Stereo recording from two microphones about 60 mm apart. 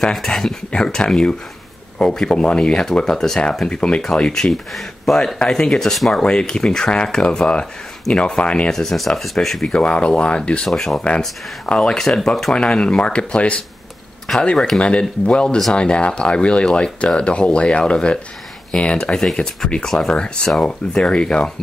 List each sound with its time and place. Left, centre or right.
0.0 s speech: centre
6.2 s speech: centre
8.7 s speech: centre
9.8 s speech: centre
10.7 s speech: centre
12.5 s speech: centre